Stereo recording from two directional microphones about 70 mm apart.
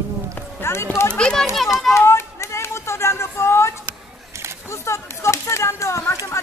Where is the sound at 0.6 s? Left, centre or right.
Left.